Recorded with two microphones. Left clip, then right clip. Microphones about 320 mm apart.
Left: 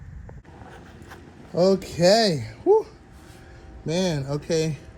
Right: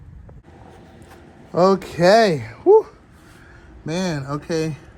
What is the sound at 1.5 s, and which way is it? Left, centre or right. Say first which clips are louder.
Speech: right 4 dB; right.